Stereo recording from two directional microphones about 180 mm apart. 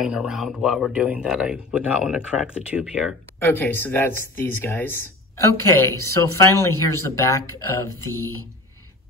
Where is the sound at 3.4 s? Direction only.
10° left (ahead or behind).